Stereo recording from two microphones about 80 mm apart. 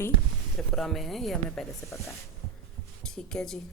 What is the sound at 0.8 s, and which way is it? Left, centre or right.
Speech, centre.